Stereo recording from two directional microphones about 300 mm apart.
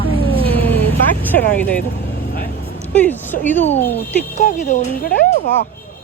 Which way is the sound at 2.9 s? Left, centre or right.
Centre.